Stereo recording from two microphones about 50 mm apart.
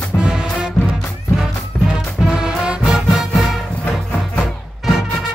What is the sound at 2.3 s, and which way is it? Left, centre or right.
Music, centre.